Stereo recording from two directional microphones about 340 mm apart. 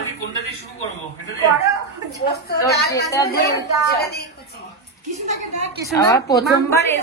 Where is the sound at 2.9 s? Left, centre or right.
Centre.